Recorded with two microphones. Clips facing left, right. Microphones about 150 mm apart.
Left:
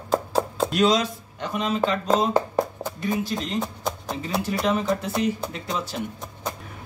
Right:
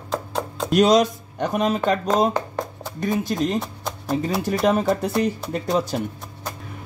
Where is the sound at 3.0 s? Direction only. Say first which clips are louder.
Right 5 dB; 45° right (ahead or behind).